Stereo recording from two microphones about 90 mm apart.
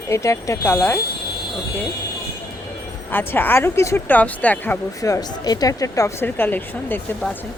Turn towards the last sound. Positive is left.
turn(degrees=20)  # may be behind; listen again after turning